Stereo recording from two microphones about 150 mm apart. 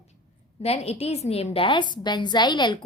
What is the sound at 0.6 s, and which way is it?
A woman's voice, 45° left (ahead or behind).